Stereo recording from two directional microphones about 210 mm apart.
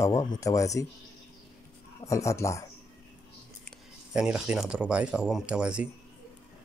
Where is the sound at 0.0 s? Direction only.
15° left (ahead or behind).